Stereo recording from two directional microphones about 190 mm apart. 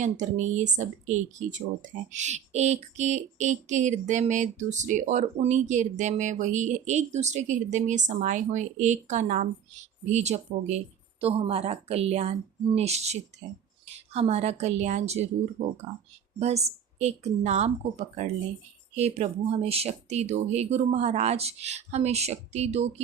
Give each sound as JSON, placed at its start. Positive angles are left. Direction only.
{"t": 0.0, "sound": "speech", "side_deg": -40}
{"t": 17.0, "sound": "speech", "side_deg": -35}
{"t": 18.9, "sound": "speech", "side_deg": -35}